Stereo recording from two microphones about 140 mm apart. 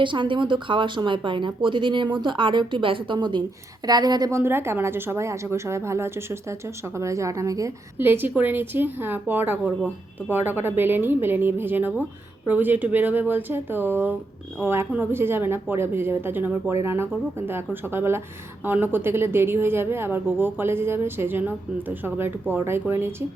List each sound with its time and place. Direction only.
0.0 s a woman's voice: 35° right (ahead or behind); by 23.1 s 15° right (ahead or behind)